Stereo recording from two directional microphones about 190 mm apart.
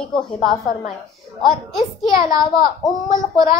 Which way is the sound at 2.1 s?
20° right (ahead or behind).